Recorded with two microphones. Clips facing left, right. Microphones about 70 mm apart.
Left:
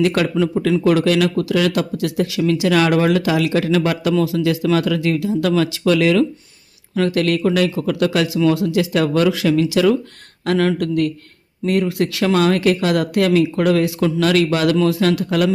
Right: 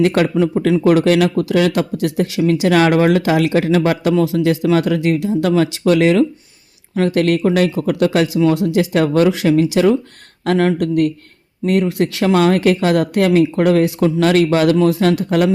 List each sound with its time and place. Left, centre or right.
0.0 s speech: right